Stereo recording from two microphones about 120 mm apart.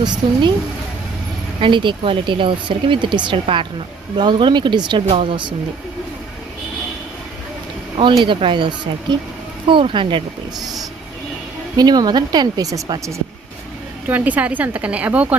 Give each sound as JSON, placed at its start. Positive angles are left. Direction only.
{"t": 0.2, "sound": "speech", "side_deg": -45}
{"t": 1.6, "sound": "speech", "side_deg": -40}
{"t": 7.9, "sound": "speech", "side_deg": -45}
{"t": 11.8, "sound": "speech", "side_deg": -35}
{"t": 14.1, "sound": "a woman's voice", "side_deg": -15}